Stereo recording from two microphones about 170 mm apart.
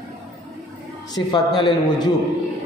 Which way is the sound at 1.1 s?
25° left (ahead or behind).